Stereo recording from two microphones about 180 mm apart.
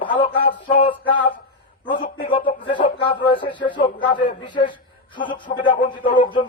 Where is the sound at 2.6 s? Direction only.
30° left (ahead or behind).